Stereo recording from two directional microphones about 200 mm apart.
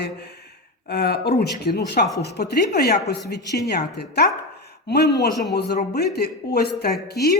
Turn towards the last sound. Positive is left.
turn(degrees=55)  # may be behind; listen again after turning